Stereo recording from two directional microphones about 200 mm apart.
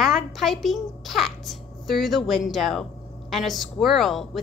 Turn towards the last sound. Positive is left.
turn(degrees=0)  # may be behind; listen again after turning